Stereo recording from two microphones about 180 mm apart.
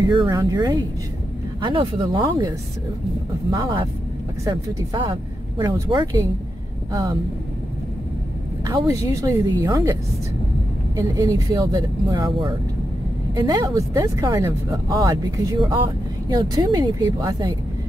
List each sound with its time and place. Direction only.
0.0 s speech: 20° right (ahead or behind)
8.6 s speech: 20° right (ahead or behind)
11.0 s speech: 20° right (ahead or behind)